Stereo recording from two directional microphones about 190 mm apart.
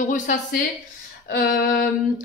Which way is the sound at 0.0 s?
40° left (ahead or behind).